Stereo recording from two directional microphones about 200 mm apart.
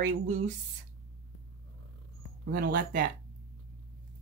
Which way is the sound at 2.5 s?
45° right (ahead or behind).